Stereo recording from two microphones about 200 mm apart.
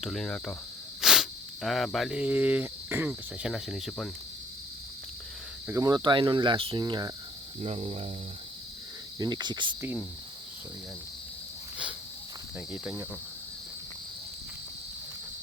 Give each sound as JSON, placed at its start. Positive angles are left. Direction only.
{"t": 0.0, "sound": "cricket", "side_deg": 0}
{"t": 1.0, "sound": "speech", "side_deg": 0}
{"t": 5.6, "sound": "cricket", "side_deg": -15}
{"t": 7.6, "sound": "speech", "side_deg": -35}
{"t": 9.1, "sound": "cricket", "side_deg": -20}
{"t": 12.5, "sound": "cricket", "side_deg": -10}